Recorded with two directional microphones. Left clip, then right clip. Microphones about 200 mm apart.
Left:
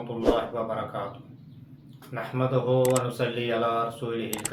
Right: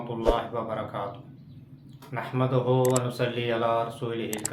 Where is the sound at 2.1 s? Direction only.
20° right (ahead or behind).